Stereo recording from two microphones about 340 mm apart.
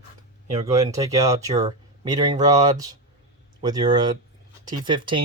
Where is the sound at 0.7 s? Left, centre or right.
Centre.